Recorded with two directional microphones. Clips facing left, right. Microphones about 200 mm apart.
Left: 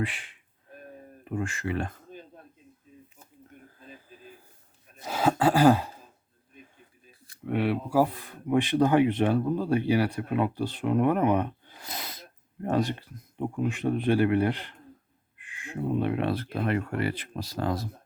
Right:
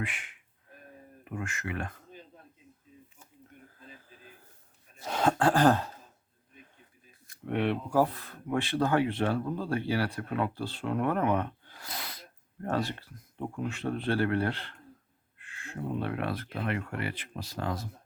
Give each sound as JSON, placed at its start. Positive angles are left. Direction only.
{"t": 0.0, "sound": "speech", "side_deg": 30}
{"t": 5.0, "sound": "speech", "side_deg": 5}
{"t": 7.4, "sound": "speech", "side_deg": 5}